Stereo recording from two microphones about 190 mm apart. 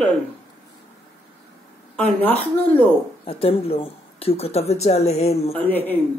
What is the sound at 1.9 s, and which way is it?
Speech, 10° left (ahead or behind).